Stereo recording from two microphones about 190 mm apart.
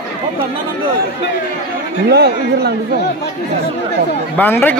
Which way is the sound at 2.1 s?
60° right (ahead or behind).